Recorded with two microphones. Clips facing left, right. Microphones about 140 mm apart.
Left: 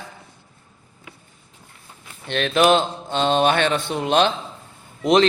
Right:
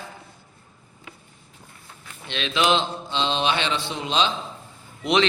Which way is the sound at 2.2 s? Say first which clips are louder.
Left 6 dB; 50° left (ahead or behind).